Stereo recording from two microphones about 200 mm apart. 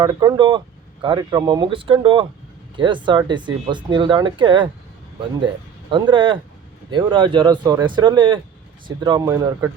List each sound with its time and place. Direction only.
0.0 s speech: 20° right (ahead or behind)
5.9 s speech: 25° right (ahead or behind)